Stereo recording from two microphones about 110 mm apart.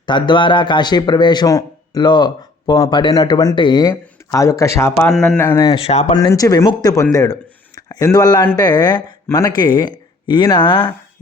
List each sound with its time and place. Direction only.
0.0 s speech: 45° left (ahead or behind); by 5.1 s 25° left (ahead or behind)
5.1 s a man's voice: 5° left (ahead or behind)
5.7 s speech: 65° left (ahead or behind)
6.1 s speech: 40° left (ahead or behind)